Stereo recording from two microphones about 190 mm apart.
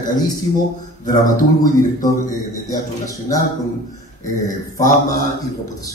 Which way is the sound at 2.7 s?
20° left (ahead or behind).